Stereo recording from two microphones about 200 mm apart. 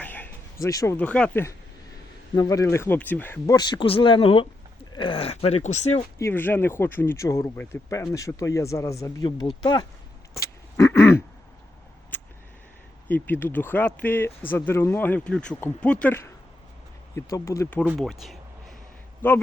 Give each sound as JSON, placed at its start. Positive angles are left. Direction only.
{"t": 0.0, "sound": "speech", "side_deg": 10}
{"t": 6.1, "sound": "speech", "side_deg": 10}
{"t": 10.4, "sound": "a sound", "side_deg": 15}
{"t": 12.1, "sound": "vehicle", "side_deg": 10}
{"t": 13.1, "sound": "speech", "side_deg": 10}